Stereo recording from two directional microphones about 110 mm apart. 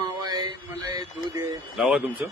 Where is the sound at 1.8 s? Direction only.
5° right (ahead or behind).